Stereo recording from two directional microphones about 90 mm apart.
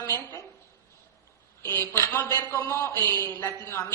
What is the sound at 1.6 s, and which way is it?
A woman's voice, 30° left (ahead or behind).